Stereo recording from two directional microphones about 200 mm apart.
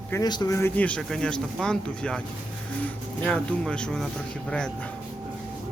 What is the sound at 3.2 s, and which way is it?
Speech, 5° left (ahead or behind).